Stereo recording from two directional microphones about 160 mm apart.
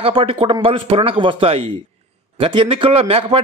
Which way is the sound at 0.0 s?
35° right (ahead or behind).